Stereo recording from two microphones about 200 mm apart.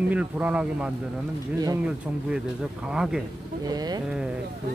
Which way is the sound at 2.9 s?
5° right (ahead or behind).